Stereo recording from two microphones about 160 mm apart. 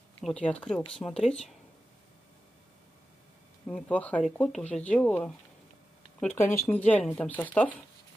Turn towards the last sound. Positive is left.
turn(degrees=10)  # may be behind; listen again after turning